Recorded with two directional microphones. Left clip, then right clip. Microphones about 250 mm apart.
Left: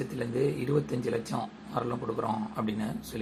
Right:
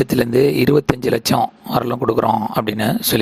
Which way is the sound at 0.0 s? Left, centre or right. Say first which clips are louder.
Right 15 dB; right.